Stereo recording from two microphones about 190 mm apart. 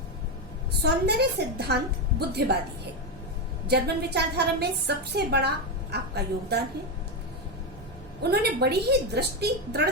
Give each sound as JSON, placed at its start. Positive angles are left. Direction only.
{"t": 0.8, "sound": "a woman's voice", "side_deg": -60}
{"t": 3.7, "sound": "a woman's voice", "side_deg": -60}
{"t": 8.2, "sound": "a woman's voice", "side_deg": -60}